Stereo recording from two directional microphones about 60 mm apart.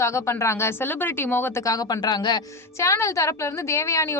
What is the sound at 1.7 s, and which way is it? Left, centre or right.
Speech, left.